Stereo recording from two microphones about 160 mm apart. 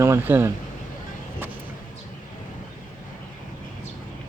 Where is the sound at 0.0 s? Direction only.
15° right (ahead or behind).